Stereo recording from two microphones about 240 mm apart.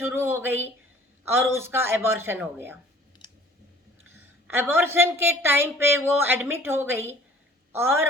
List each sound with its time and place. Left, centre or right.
0.0 s a woman's voice: centre
3.2 s clicking: centre
4.4 s a woman's voice: centre